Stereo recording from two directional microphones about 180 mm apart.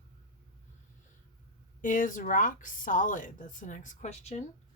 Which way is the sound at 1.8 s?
45° left (ahead or behind).